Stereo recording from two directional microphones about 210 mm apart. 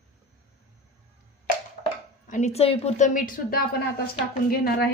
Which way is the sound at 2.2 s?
35° left (ahead or behind).